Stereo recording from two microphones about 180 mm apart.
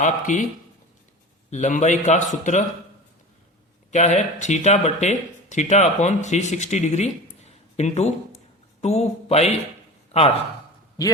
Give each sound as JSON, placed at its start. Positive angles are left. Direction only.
{"t": 0.0, "sound": "a man's voice", "side_deg": 45}
{"t": 1.5, "sound": "speech", "side_deg": 40}
{"t": 3.9, "sound": "speech", "side_deg": 40}